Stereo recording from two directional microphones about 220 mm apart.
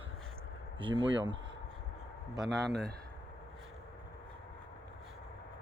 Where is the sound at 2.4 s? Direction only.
50° right (ahead or behind).